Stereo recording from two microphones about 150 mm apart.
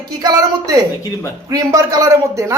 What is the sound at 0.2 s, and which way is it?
Speech, 25° right (ahead or behind).